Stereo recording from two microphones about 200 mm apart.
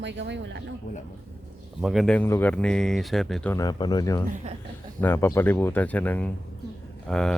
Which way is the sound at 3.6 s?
20° left (ahead or behind).